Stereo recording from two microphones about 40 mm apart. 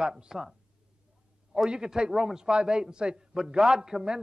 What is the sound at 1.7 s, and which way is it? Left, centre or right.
Speech, right.